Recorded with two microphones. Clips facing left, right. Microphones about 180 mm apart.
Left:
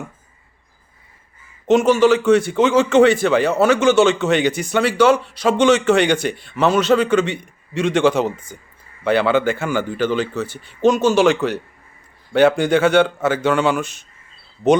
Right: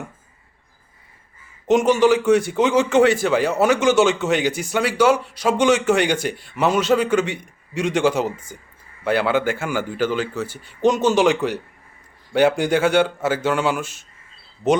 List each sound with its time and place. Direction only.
1.6 s a man's voice: 15° right (ahead or behind)